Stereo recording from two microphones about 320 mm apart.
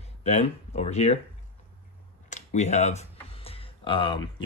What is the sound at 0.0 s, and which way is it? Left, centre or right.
Speech, centre.